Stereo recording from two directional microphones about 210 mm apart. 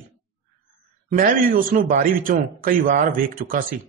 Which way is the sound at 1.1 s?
40° right (ahead or behind).